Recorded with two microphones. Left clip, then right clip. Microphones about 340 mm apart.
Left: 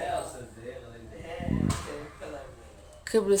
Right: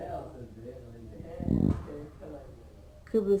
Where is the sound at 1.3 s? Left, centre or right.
Left.